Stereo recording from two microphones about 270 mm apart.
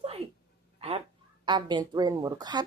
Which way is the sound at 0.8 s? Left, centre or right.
Right.